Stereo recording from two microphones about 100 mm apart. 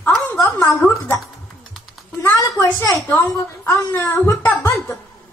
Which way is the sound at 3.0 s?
20° left (ahead or behind).